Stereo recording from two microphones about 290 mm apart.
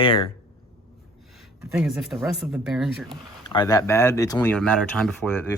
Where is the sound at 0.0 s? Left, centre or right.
Centre.